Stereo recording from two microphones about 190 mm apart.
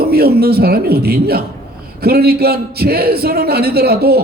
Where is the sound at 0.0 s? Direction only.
55° right (ahead or behind).